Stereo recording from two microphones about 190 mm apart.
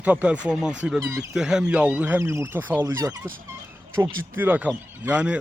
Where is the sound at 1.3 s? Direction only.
5° right (ahead or behind).